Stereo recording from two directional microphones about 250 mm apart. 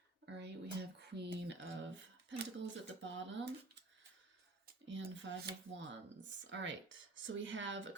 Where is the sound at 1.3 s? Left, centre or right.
Right.